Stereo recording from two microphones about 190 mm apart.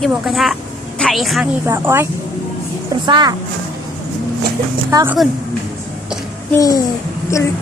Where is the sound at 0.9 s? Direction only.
Centre (ahead or behind).